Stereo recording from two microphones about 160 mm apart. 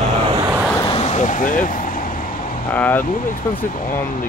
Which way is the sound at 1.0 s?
45° left (ahead or behind).